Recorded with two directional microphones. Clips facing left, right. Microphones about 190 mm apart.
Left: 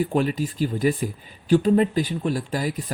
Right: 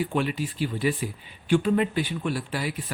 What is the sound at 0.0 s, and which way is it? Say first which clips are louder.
Speech: left 4 dB; 40° left (ahead or behind).